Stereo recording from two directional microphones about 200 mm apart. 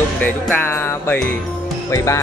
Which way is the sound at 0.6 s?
10° left (ahead or behind).